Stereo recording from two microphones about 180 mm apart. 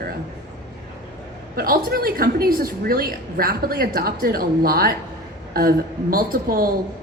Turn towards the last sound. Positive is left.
turn(degrees=-55)  # may be behind; listen again after turning